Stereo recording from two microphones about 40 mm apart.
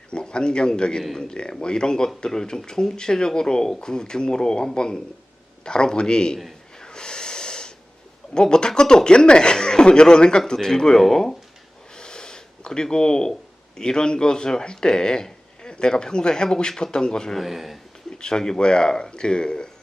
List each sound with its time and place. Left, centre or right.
0.1 s a man's voice: left
6.7 s snort: centre
8.3 s speech: centre
11.9 s a sound: centre
13.7 s speech: centre
17.3 s speech: centre
18.2 s speech: centre